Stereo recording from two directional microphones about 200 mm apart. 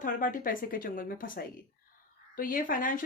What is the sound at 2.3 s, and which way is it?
Speech, 45° left (ahead or behind).